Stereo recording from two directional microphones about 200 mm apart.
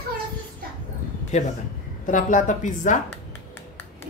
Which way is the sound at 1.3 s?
35° left (ahead or behind).